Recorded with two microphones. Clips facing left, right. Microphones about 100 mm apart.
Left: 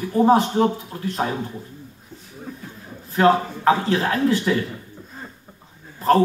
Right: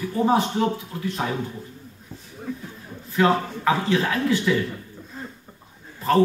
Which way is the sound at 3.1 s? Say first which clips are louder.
Left 3 dB; 35° left (ahead or behind).